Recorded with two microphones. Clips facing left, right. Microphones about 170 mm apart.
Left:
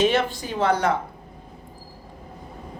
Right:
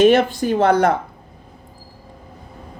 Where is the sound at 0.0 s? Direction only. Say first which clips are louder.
Right 8 dB; 50° right (ahead or behind).